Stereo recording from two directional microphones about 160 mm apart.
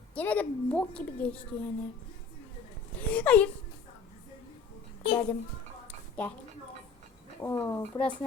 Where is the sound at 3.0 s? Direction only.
10° left (ahead or behind).